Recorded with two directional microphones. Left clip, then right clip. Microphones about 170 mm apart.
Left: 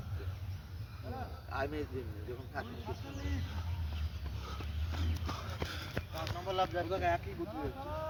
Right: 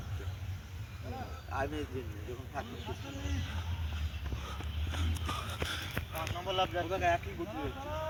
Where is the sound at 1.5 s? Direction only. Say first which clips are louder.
Right 2 dB; 35° right (ahead or behind).